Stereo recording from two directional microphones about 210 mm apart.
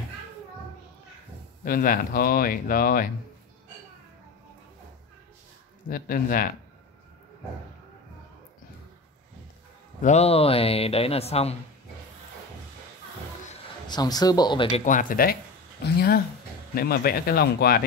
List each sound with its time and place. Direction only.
1.6 s speech: 45° left (ahead or behind)
5.9 s speech: 45° left (ahead or behind)
10.0 s speech: 30° left (ahead or behind)
13.8 s speech: 20° left (ahead or behind)
14.9 s speech: 40° left (ahead or behind)